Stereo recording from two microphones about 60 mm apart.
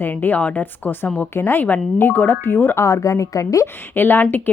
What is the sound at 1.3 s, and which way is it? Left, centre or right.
Speech, left.